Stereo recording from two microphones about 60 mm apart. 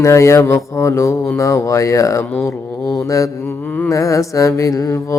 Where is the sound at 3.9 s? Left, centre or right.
Left.